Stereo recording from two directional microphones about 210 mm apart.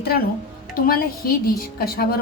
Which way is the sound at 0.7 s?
45° left (ahead or behind).